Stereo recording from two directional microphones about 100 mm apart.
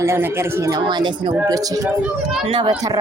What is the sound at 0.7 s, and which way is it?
Speech, 45° right (ahead or behind).